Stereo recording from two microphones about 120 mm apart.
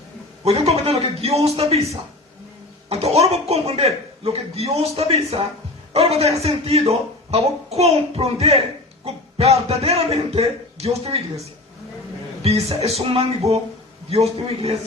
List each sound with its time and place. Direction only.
0.4 s a man's voice: 60° right (ahead or behind)
12.4 s a man's voice: 60° right (ahead or behind)